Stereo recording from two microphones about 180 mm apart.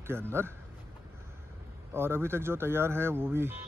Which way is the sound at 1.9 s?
15° right (ahead or behind).